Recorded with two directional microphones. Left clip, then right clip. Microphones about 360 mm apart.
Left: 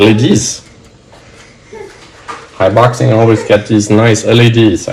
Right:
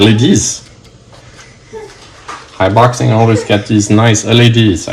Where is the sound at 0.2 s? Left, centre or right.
Right.